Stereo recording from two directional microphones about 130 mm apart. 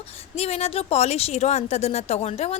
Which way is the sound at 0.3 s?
50° left (ahead or behind).